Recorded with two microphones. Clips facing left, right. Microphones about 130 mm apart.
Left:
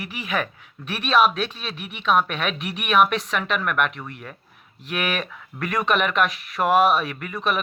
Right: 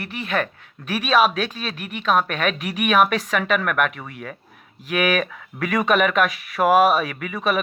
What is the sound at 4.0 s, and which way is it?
Speech, 65° right (ahead or behind).